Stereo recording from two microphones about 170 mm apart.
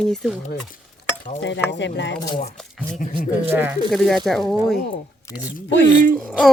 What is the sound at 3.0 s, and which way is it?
Speech, 55° left (ahead or behind).